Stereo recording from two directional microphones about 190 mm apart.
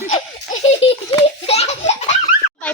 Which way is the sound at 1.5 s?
35° left (ahead or behind).